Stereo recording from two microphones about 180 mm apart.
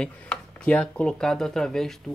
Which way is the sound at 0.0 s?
5° left (ahead or behind).